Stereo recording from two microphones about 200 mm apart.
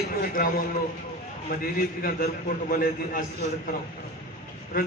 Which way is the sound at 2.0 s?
45° left (ahead or behind).